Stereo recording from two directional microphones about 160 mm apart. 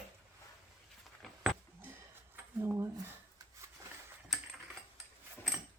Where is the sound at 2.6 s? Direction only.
15° right (ahead or behind).